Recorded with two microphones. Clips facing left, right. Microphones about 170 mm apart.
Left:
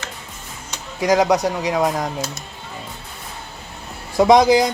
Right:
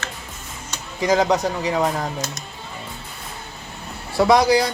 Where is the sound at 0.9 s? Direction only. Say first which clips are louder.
Left 2 dB; 10° left (ahead or behind).